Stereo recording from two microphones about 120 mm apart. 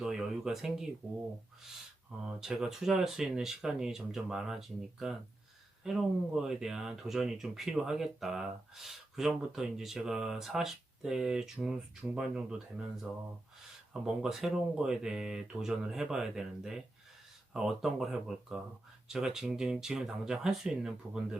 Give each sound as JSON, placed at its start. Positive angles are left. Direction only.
{"t": 0.0, "sound": "speech", "side_deg": -5}
{"t": 2.4, "sound": "speech", "side_deg": -5}